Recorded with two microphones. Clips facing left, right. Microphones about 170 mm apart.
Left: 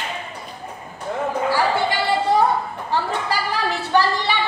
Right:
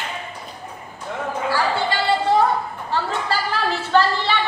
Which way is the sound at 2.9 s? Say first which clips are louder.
Even; 15° left (ahead or behind).